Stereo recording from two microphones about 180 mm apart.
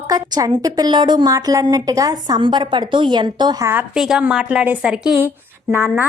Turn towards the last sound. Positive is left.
turn(degrees=-10)  # may be behind; listen again after turning